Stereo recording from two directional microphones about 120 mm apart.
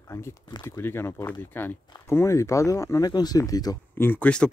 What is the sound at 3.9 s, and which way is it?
Speech, 15° left (ahead or behind).